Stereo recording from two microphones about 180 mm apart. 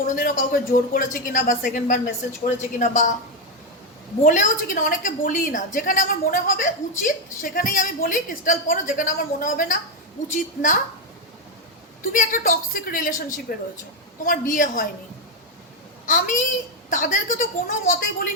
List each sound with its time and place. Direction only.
0.2 s a woman's voice: 50° left (ahead or behind)
4.2 s a woman's voice: 45° left (ahead or behind)
12.0 s a woman's voice: 50° left (ahead or behind)
16.0 s a woman's voice: 45° left (ahead or behind)